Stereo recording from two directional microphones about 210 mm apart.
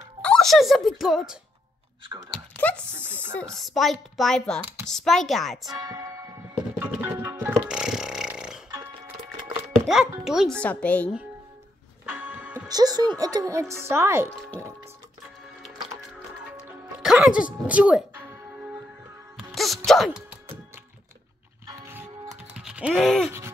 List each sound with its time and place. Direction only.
0.2 s a child's voice: 5° left (ahead or behind)
2.3 s a sound: 5° left (ahead or behind)
2.9 s speech: 10° right (ahead or behind)
3.5 s a child's voice: centre (ahead or behind)
5.7 s speech: 20° right (ahead or behind)
6.5 s music: 10° right (ahead or behind)
7.5 s a sound: 5° right (ahead or behind)
9.8 s a child's voice: centre (ahead or behind)
12.1 s church bell: 5° right (ahead or behind)
12.6 s speech: 20° right (ahead or behind)
16.0 s music: 5° right (ahead or behind)
21.6 s music: 10° right (ahead or behind)